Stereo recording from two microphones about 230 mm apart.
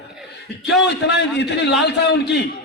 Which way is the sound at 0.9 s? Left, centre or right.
Left.